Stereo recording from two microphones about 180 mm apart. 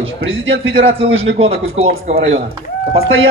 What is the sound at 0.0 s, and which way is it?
Speech, 90° right.